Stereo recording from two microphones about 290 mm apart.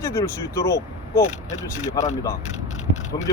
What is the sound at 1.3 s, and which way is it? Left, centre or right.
Speech, left.